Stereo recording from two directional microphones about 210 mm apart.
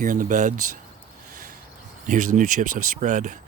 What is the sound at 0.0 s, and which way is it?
Speech, 40° right (ahead or behind).